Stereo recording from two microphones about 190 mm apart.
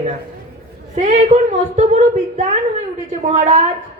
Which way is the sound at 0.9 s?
35° right (ahead or behind).